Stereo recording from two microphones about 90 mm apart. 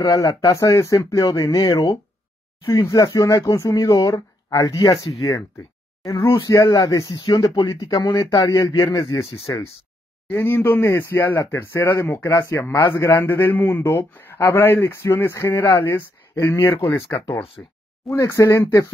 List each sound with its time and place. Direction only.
0.1 s speech: 35° left (ahead or behind)
7.2 s speech: 50° left (ahead or behind)
10.3 s speech: 25° left (ahead or behind)
17.6 s speech: 20° left (ahead or behind)
18.2 s speech: 40° left (ahead or behind)